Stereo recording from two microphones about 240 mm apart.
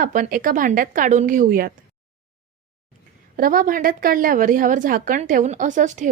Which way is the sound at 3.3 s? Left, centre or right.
Right.